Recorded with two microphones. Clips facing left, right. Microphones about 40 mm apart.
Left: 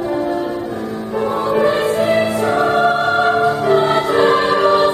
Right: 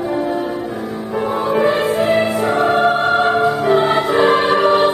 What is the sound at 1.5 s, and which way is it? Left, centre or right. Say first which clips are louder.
Music: even; centre.